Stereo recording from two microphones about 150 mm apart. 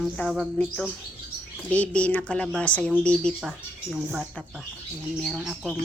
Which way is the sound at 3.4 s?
5° right (ahead or behind).